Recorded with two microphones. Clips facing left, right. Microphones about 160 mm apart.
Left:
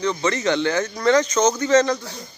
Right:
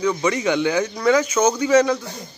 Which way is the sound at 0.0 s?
10° right (ahead or behind).